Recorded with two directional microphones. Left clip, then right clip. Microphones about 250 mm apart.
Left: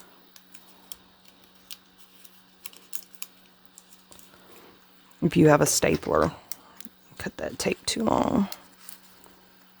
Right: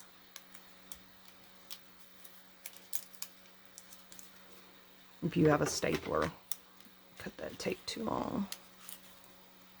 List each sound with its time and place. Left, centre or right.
5.3 s speech: left